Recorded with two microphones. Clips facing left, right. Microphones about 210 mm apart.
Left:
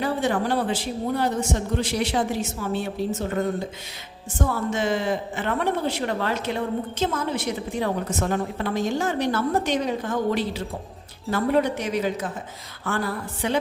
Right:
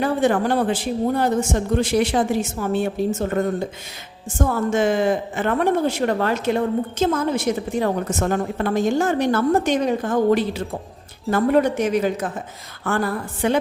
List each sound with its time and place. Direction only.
0.0 s a woman's voice: 50° right (ahead or behind)
4.4 s a woman's voice: 50° right (ahead or behind)
13.4 s a woman's voice: 50° right (ahead or behind)